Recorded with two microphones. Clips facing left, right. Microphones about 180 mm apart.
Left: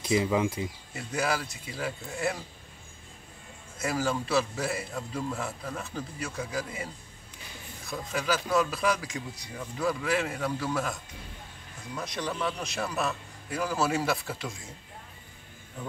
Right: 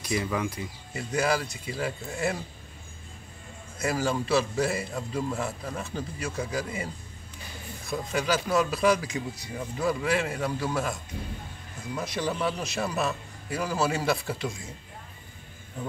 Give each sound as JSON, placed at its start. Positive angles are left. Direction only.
{"t": 0.0, "sound": "speech", "side_deg": 20}
{"t": 0.9, "sound": "a man's voice", "side_deg": 0}
{"t": 3.7, "sound": "a man's voice", "side_deg": 0}
{"t": 12.0, "sound": "a man's voice", "side_deg": -5}